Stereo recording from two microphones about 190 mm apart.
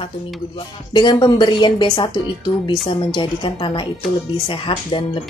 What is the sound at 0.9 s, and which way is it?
Speech, 20° left (ahead or behind).